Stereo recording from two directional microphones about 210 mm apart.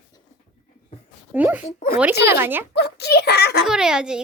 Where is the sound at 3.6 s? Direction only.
5° right (ahead or behind).